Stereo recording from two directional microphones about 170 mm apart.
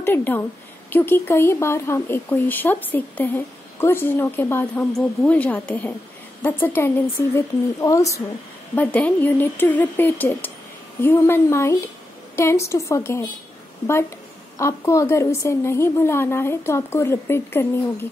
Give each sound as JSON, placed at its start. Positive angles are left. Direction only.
{"t": 0.0, "sound": "speech", "side_deg": 10}
{"t": 14.6, "sound": "speech", "side_deg": 15}